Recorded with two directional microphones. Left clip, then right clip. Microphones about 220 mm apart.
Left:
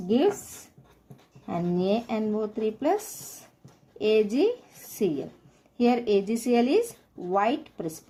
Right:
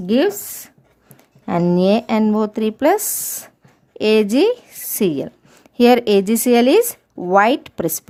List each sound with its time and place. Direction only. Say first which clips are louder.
1.5 s speech: right 11 dB; 40° right (ahead or behind)